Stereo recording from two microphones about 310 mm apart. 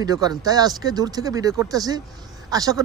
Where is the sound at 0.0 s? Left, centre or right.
Centre.